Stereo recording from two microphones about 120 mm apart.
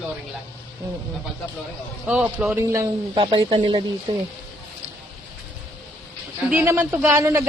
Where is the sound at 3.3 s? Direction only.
45° right (ahead or behind).